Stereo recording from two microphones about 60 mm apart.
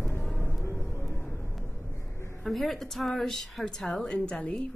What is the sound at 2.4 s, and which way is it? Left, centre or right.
A woman's voice, centre.